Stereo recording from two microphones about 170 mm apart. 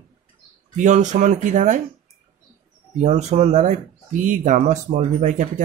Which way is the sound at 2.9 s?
45° right (ahead or behind).